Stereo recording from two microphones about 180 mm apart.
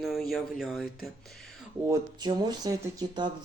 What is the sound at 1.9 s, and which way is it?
Speech, 25° right (ahead or behind).